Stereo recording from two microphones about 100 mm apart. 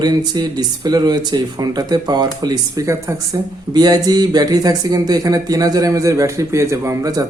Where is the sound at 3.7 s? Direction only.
40° right (ahead or behind).